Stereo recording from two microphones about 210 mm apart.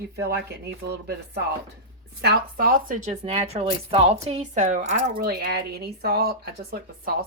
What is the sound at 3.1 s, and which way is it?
A woman's voice, 30° right (ahead or behind).